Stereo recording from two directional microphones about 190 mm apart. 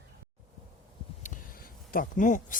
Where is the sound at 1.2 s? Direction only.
45° left (ahead or behind).